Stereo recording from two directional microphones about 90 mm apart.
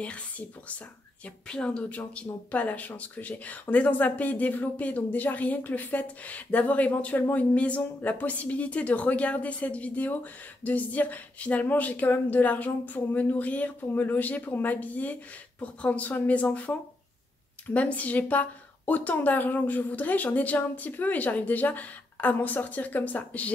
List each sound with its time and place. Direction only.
0.0 s speech: 15° left (ahead or behind)
17.7 s speech: 15° left (ahead or behind)